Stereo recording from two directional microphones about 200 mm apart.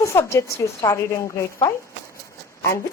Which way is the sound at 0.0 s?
15° left (ahead or behind).